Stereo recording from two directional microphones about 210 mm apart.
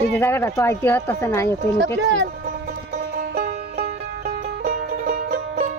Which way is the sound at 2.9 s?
40° right (ahead or behind).